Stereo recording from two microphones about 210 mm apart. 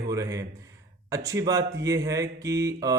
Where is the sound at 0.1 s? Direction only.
15° right (ahead or behind).